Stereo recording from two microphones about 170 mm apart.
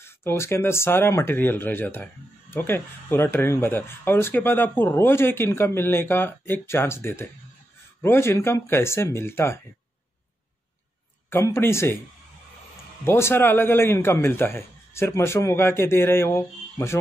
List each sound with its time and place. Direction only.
0.0 s speech: 15° left (ahead or behind)
11.2 s speech: 15° left (ahead or behind)
13.0 s speech: 15° left (ahead or behind)